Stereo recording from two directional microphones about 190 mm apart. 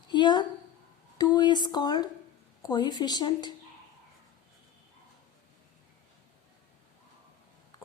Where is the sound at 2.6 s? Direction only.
20° left (ahead or behind).